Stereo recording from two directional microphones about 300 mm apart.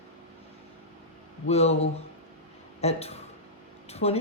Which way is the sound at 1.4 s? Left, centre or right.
Left.